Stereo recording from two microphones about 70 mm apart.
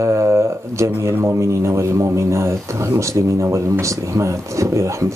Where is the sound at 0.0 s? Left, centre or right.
Right.